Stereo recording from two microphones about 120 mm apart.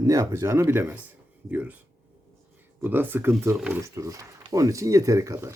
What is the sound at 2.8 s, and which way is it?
Speech, 15° right (ahead or behind).